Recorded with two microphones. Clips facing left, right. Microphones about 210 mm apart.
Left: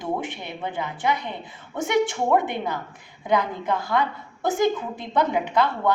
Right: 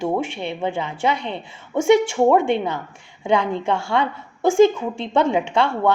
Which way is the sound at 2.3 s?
25° right (ahead or behind).